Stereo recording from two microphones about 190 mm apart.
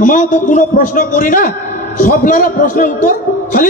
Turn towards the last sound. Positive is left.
turn(degrees=45)  # may be behind; listen again after turning